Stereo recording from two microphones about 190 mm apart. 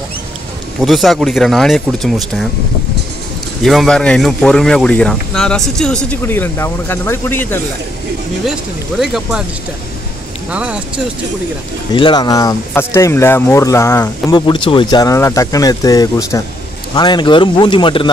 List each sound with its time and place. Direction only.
0.7 s speech: centre (ahead or behind)
3.6 s speech: centre (ahead or behind)
9.0 s speech: 5° right (ahead or behind)
10.5 s speech: 5° right (ahead or behind)
11.9 s speech: 25° left (ahead or behind)
14.4 s speech: 25° left (ahead or behind)